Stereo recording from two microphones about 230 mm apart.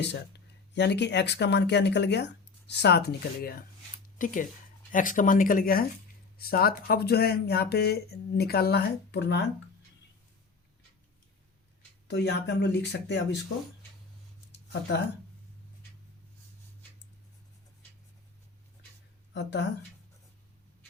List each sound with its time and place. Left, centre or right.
0.7 s speech: left
12.0 s speech: left
14.5 s a sound: left
19.3 s a woman's voice: left